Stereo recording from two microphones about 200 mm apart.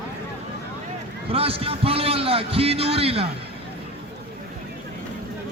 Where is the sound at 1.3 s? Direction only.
30° right (ahead or behind).